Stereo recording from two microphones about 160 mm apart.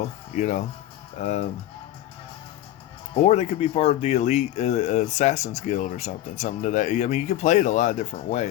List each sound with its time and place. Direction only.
0.3 s speech: 50° left (ahead or behind)
3.2 s speech: 40° left (ahead or behind)